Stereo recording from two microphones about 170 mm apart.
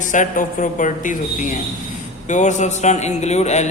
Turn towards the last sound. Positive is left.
turn(degrees=40)  # may be behind; listen again after turning